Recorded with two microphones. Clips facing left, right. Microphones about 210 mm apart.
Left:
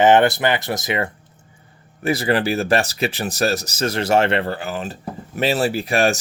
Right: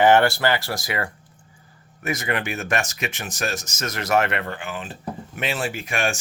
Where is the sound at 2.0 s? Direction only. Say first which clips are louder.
Left 7 dB; 30° left (ahead or behind).